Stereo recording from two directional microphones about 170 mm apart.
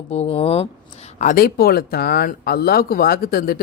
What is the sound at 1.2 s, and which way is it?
Speech, 55° left (ahead or behind).